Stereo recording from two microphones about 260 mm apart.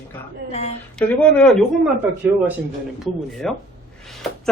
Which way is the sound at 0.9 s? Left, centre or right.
Centre.